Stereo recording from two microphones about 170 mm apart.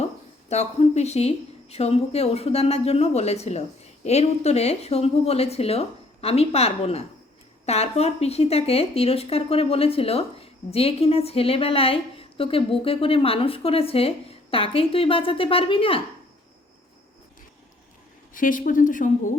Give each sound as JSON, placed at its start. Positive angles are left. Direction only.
{"t": 0.0, "sound": "speech", "side_deg": 40}
{"t": 18.3, "sound": "speech", "side_deg": 50}